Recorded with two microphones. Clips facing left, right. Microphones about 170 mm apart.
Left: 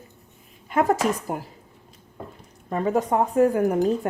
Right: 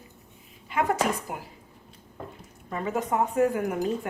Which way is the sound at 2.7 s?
35° left (ahead or behind).